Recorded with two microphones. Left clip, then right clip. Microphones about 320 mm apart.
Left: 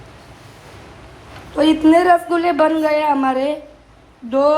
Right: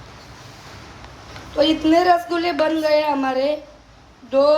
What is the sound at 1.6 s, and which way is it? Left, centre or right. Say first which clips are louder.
Speech: left 3 dB; left.